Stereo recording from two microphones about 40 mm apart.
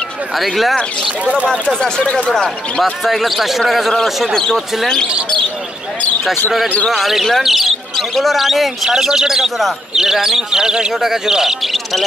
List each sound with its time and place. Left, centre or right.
0.4 s speech: centre
1.2 s speech: right
1.5 s speech: centre
2.8 s speech: centre
4.0 s speech: centre
7.0 s speech: centre
8.8 s speech: centre
11.6 s bird: centre